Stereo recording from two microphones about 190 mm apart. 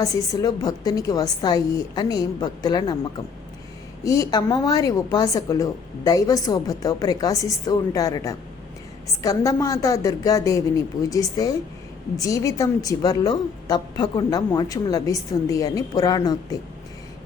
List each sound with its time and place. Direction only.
0.0 s a woman's voice: 20° left (ahead or behind)